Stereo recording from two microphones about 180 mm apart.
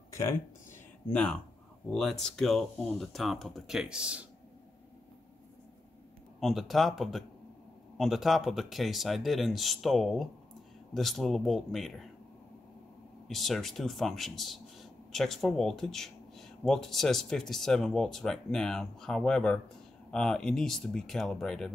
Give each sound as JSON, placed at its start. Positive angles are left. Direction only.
{"t": 0.1, "sound": "a sound", "side_deg": 15}
{"t": 1.1, "sound": "speech", "side_deg": 5}
{"t": 6.4, "sound": "speech", "side_deg": 0}
{"t": 13.3, "sound": "speech", "side_deg": 0}